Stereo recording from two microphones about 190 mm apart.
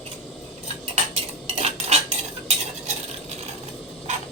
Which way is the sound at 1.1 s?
35° right (ahead or behind).